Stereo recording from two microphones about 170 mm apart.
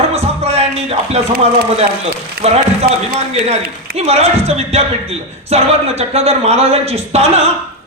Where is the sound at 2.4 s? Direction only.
35° right (ahead or behind).